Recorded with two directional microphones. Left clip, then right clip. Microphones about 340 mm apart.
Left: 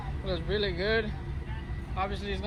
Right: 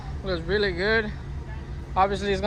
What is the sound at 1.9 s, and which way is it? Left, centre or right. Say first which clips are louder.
Speech: right 11 dB; centre.